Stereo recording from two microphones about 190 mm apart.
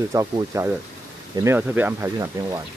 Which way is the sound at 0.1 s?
15° right (ahead or behind).